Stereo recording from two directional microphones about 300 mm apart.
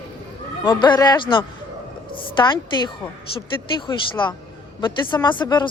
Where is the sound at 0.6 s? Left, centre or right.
Centre.